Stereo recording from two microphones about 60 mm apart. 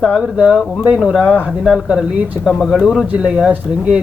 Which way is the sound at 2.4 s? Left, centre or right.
Centre.